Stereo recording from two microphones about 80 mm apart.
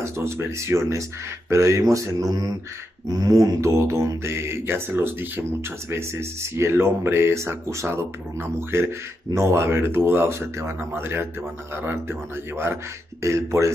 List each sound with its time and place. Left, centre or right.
0.0 s speech: right